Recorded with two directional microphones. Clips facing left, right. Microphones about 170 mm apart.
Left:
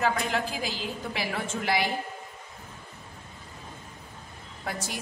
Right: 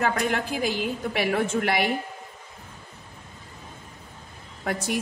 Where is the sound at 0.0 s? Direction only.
55° right (ahead or behind).